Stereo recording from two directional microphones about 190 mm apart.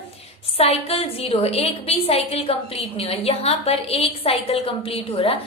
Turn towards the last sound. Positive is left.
turn(degrees=30)  # may be behind; listen again after turning